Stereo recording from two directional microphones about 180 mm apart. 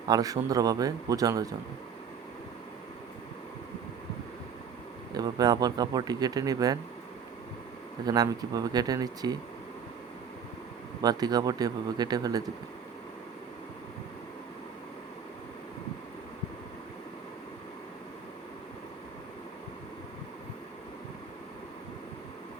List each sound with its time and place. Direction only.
0.1 s speech: 20° right (ahead or behind)
5.1 s speech: 20° right (ahead or behind)
8.0 s speech: 20° right (ahead or behind)
11.0 s speech: 20° right (ahead or behind)